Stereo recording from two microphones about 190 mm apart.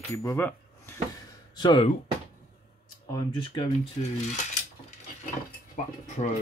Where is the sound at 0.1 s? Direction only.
15° left (ahead or behind).